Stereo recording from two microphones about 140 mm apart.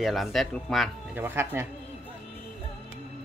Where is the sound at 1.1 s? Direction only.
15° right (ahead or behind).